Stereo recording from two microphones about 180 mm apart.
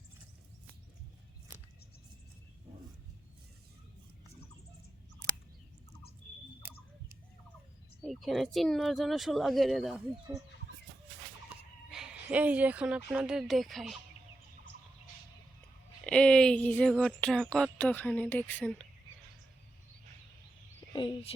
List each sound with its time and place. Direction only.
6.6 s a sound: 10° right (ahead or behind)
8.0 s speech: centre (ahead or behind)
11.9 s speech: 5° right (ahead or behind)
16.0 s speech: 5° left (ahead or behind)
20.9 s speech: 25° left (ahead or behind)